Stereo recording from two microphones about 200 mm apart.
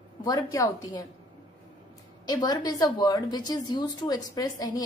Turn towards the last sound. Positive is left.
turn(degrees=20)  # may be behind; listen again after turning